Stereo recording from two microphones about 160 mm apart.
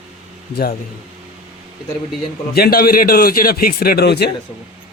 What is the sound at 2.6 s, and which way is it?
A man's voice, 70° left (ahead or behind).